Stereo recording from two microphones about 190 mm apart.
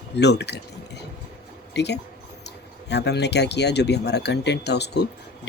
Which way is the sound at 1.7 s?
65° left (ahead or behind).